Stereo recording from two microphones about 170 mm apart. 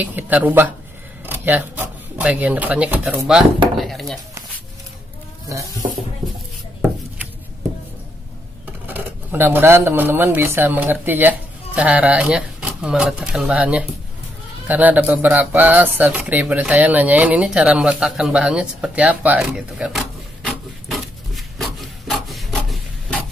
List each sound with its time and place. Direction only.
0.0 s speech: 10° right (ahead or behind)
3.7 s a sound: centre (ahead or behind)
5.5 s goat: 20° right (ahead or behind)
8.8 s speech: 10° right (ahead or behind)
21.5 s rub: centre (ahead or behind)